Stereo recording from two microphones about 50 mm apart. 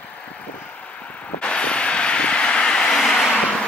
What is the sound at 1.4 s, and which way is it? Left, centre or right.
Vehicle, left.